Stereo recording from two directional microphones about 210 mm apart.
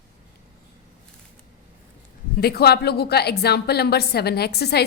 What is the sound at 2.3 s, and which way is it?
A woman's voice, 50° left (ahead or behind).